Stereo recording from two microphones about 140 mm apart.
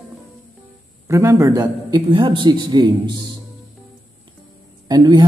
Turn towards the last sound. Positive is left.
turn(degrees=-30)  # may be behind; listen again after turning